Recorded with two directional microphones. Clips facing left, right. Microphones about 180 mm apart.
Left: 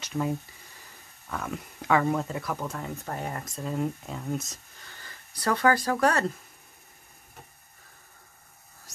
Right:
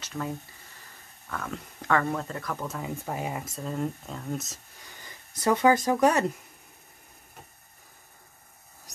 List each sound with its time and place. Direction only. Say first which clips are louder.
0.0 s speech: left 4 dB; 15° left (ahead or behind)
1.3 s speech: left 1 dB; 10° left (ahead or behind)
2.7 s speech: right 1 dB; 5° right (ahead or behind)
3.6 s speech: left 2 dB; 5° left (ahead or behind)
4.8 s speech: right 1 dB; 15° right (ahead or behind)